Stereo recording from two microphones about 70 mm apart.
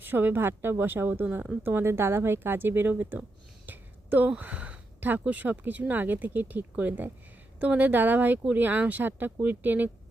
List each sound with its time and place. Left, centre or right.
0.0 s speech: right
3.7 s a sound: right
4.4 s speech: right